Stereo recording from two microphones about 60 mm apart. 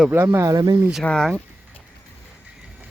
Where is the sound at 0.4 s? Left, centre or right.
Right.